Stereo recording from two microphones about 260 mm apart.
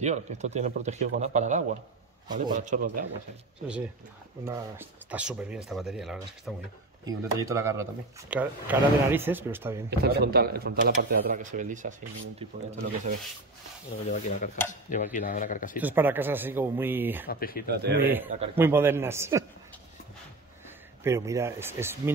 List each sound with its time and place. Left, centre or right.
0.0 s a man's voice: right
4.5 s speech: centre
7.1 s speech: centre
9.8 s speech: right
14.1 s stir: left
15.1 s speech: left
15.8 s speech: centre
17.3 s speech: left
17.6 s speech: right
18.0 s speech: centre
18.3 s a man's voice: right
18.6 s speech: centre
21.0 s speech: centre